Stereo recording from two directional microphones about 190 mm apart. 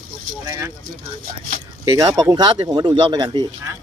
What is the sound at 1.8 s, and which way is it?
Speech, 20° right (ahead or behind).